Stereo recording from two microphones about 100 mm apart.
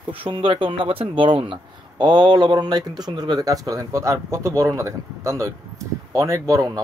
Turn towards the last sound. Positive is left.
turn(degrees=-30)  # may be behind; listen again after turning